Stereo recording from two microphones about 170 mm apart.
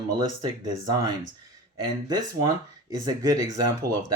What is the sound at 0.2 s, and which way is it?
Speech, 25° right (ahead or behind).